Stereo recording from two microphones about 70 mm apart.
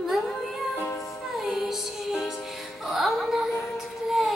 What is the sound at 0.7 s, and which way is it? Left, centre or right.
Music, left.